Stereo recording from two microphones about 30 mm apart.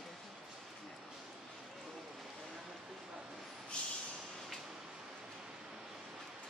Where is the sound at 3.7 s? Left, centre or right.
Left.